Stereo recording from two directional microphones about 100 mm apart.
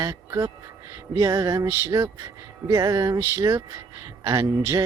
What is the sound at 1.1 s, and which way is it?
Music, 35° right (ahead or behind).